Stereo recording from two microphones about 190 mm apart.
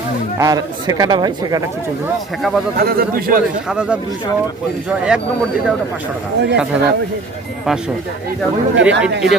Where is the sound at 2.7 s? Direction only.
55° right (ahead or behind).